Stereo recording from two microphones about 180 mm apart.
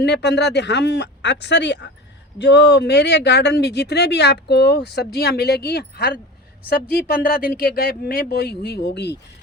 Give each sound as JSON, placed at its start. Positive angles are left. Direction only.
{"t": 0.0, "sound": "speech", "side_deg": 70}